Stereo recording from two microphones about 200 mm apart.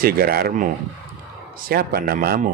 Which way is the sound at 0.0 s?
50° right (ahead or behind).